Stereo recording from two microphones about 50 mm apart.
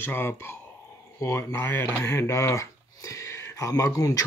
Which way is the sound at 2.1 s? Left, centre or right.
Left.